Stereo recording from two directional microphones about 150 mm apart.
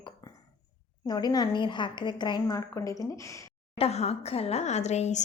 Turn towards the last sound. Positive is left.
turn(degrees=50)  # may be behind; listen again after turning